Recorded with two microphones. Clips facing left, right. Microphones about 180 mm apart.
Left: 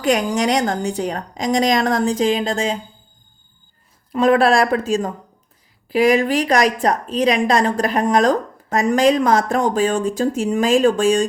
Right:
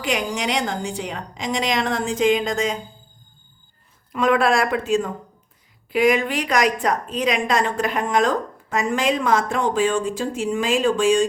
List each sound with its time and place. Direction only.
0.0 s a woman's voice: 45° left (ahead or behind)
4.1 s a woman's voice: 35° left (ahead or behind)